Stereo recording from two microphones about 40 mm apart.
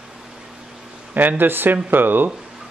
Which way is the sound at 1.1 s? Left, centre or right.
Right.